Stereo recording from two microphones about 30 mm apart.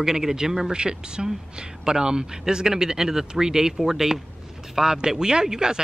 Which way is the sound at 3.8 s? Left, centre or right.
Centre.